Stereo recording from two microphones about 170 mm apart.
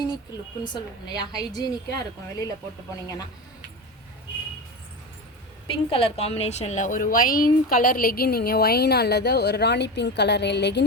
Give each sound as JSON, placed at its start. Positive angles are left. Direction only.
{"t": 0.3, "sound": "a woman's voice", "side_deg": 25}
{"t": 5.6, "sound": "a woman's voice", "side_deg": 30}